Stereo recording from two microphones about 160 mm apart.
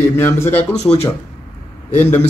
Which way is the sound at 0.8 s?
40° left (ahead or behind).